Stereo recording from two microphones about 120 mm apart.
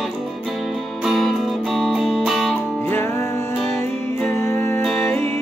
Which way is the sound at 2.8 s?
15° left (ahead or behind).